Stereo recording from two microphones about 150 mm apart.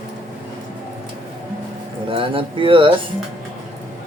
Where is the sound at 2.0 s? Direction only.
35° right (ahead or behind).